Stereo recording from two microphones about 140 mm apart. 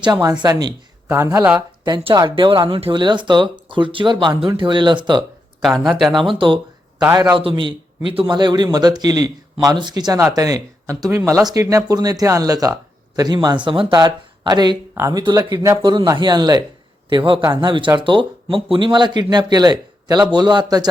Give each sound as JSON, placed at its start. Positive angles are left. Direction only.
{"t": 1.1, "sound": "speech", "side_deg": -20}
{"t": 2.1, "sound": "speech", "side_deg": -35}
{"t": 5.8, "sound": "speech", "side_deg": 0}
{"t": 6.2, "sound": "speech", "side_deg": -35}